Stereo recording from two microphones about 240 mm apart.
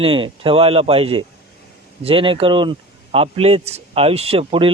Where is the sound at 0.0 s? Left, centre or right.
Right.